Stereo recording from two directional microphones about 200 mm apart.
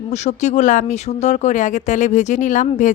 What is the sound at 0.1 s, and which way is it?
Speech, 35° left (ahead or behind).